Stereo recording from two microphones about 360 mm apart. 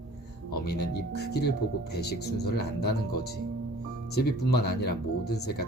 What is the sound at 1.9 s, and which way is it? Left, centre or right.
Speech, left.